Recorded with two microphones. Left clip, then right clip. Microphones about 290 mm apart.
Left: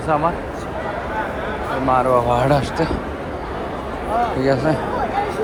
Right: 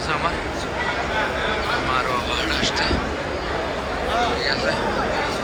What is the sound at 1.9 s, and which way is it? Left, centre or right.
Speech, centre.